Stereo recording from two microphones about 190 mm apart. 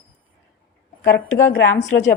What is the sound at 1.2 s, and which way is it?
Speech, 15° left (ahead or behind).